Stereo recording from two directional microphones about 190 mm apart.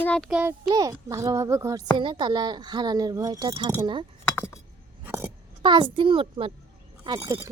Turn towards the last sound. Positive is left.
turn(degrees=-15)  # may be behind; listen again after turning